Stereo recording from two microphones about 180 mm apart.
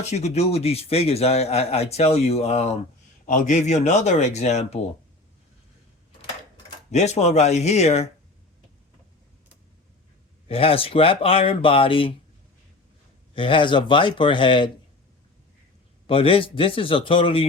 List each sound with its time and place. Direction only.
0.0 s a man's voice: 40° left (ahead or behind)
6.9 s a man's voice: 40° left (ahead or behind)
10.5 s a man's voice: 30° left (ahead or behind)
13.3 s speech: 30° left (ahead or behind)
16.0 s speech: 30° left (ahead or behind)